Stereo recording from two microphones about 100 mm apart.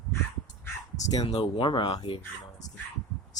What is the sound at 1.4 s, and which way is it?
Speech, 55° left (ahead or behind).